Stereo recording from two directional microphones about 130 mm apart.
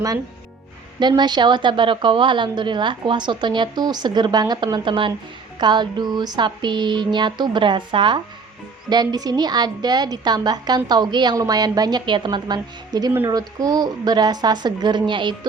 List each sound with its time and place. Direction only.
0.9 s a woman's voice: 35° right (ahead or behind)